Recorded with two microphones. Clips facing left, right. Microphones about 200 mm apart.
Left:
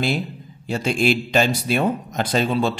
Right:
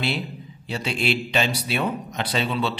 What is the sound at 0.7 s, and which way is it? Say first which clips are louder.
Speech: left 5 dB; 45° left (ahead or behind).